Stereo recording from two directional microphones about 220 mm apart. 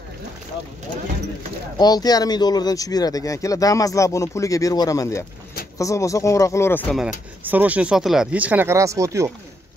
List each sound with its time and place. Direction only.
1.8 s speech: 20° left (ahead or behind)
7.0 s speech: 5° right (ahead or behind)